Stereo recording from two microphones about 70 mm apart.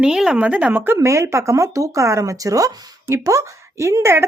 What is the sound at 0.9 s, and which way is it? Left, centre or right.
Speech, right.